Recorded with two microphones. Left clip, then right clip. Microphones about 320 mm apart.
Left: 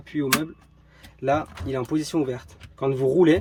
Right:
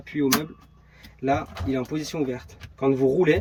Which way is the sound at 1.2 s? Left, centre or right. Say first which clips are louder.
Left 1 dB; left.